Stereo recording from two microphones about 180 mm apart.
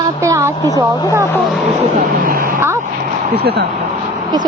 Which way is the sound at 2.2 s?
50° right (ahead or behind).